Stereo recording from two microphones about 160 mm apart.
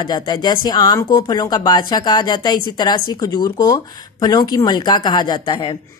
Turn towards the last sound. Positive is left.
turn(degrees=30)  # may be behind; listen again after turning